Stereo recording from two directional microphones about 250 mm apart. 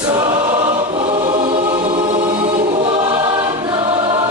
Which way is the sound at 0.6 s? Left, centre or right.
Centre.